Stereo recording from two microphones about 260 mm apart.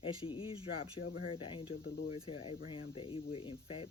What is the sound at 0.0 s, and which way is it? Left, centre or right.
Speech, centre.